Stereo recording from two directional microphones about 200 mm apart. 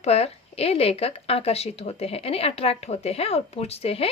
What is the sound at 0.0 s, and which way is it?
Speech, 30° left (ahead or behind).